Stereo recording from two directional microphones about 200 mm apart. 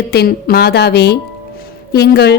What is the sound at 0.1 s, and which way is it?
A woman's voice, 50° left (ahead or behind).